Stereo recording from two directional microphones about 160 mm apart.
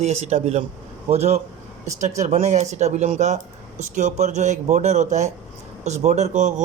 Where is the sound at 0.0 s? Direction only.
40° right (ahead or behind).